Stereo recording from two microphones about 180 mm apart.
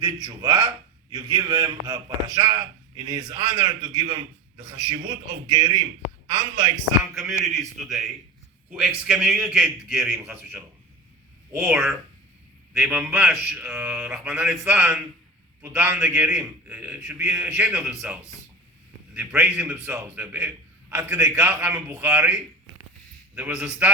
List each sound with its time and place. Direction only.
0.0 s a man's voice: 25° right (ahead or behind)
7.4 s a man's voice: centre (ahead or behind)
9.0 s a man's voice: 5° right (ahead or behind)